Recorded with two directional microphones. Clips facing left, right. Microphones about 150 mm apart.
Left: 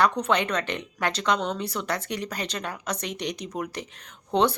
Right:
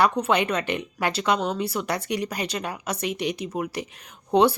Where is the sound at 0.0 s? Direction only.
10° right (ahead or behind).